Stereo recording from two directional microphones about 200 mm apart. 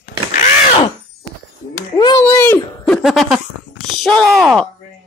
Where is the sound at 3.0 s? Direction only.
Centre (ahead or behind).